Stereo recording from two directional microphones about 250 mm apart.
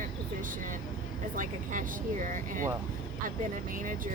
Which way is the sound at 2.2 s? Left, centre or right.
Right.